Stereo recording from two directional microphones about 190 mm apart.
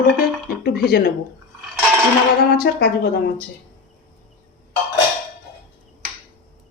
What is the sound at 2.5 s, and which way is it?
Speech, 55° left (ahead or behind).